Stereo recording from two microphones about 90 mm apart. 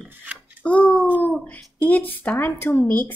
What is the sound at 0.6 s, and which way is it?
Speech, 15° left (ahead or behind).